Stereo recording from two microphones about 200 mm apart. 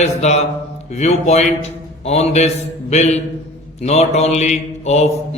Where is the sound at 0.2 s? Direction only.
35° left (ahead or behind).